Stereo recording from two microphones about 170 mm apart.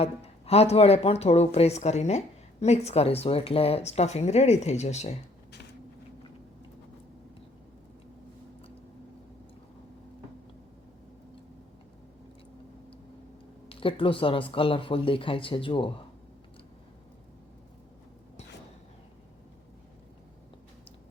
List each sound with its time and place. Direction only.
0.0 s speech: 35° left (ahead or behind)
13.7 s speech: 30° left (ahead or behind)